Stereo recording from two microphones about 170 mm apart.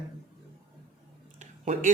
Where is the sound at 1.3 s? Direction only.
45° right (ahead or behind).